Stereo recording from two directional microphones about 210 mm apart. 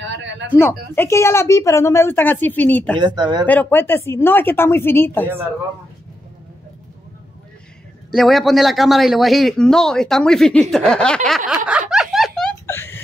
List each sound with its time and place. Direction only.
0.0 s a sound: 60° right (ahead or behind)
0.6 s a woman's voice: 10° left (ahead or behind)
3.0 s speech: 20° right (ahead or behind)
3.4 s a woman's voice: 10° left (ahead or behind)
8.1 s a man's voice: centre (ahead or behind)
11.9 s laughter: centre (ahead or behind)